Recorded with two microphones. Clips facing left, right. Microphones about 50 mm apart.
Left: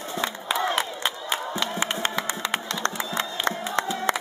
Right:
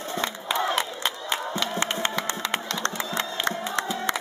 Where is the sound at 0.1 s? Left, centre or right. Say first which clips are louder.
Left 1 dB; centre.